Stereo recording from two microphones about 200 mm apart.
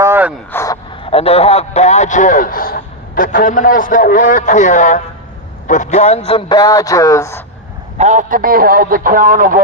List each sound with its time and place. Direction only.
0.0 s a sound: 10° right (ahead or behind)
0.5 s speech: 15° left (ahead or behind)
1.0 s a man's voice: 30° left (ahead or behind)
7.9 s a man's voice: 35° right (ahead or behind)